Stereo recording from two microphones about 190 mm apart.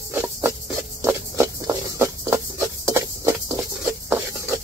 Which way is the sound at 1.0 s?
15° right (ahead or behind).